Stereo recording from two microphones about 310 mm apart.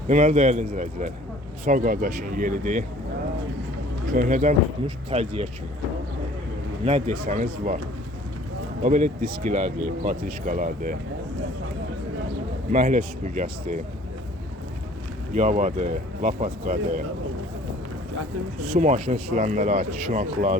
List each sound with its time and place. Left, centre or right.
0.1 s speech: right
4.1 s speech: right
6.8 s speech: centre
8.8 s speech: right
12.7 s speech: right
15.4 s speech: right
18.7 s speech: right